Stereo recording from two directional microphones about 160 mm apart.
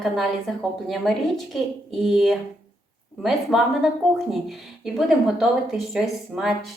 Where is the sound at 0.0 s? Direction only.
Centre (ahead or behind).